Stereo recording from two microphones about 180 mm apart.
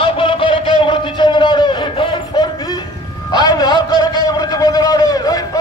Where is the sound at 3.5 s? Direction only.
20° left (ahead or behind).